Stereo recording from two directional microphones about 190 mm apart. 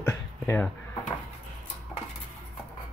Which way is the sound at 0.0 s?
10° left (ahead or behind).